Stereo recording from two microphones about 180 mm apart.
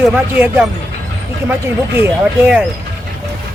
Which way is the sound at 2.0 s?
5° right (ahead or behind).